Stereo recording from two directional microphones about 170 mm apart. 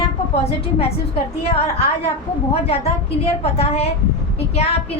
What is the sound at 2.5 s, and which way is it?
Speech, 35° left (ahead or behind).